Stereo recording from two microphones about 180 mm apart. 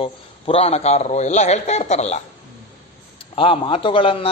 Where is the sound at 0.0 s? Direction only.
30° left (ahead or behind).